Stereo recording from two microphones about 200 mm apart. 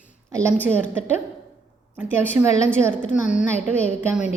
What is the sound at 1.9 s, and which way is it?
A woman's voice, 10° right (ahead or behind).